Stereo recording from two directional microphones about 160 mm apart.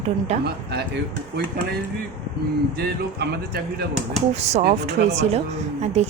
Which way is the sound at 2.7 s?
75° right (ahead or behind).